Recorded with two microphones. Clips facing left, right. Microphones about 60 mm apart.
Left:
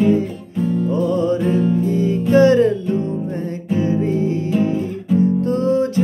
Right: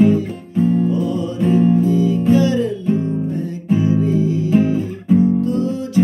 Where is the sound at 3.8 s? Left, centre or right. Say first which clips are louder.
Even; left.